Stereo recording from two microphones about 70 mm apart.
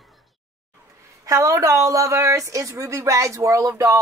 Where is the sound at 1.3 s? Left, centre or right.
Right.